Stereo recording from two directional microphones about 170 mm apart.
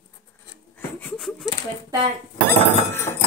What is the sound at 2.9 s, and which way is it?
Hammer, 15° left (ahead or behind).